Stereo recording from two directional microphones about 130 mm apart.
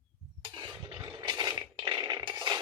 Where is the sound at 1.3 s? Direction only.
30° right (ahead or behind).